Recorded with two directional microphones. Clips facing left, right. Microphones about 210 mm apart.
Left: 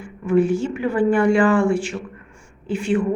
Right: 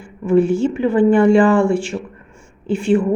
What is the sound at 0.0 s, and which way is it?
A woman's voice, 25° right (ahead or behind).